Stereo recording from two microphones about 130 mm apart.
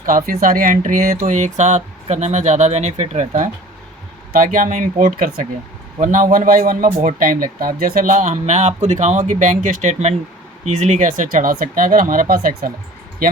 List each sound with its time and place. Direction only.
0.4 s speech: 90° right; by 3.5 s 70° right (ahead or behind)
4.4 s a man's voice: 90° right